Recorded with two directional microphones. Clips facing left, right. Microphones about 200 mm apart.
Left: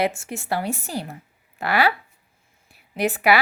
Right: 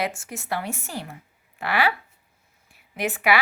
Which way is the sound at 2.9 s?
35° left (ahead or behind).